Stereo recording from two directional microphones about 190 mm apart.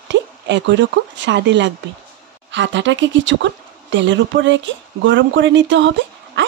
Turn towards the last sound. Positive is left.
turn(degrees=-70)  # may be behind; listen again after turning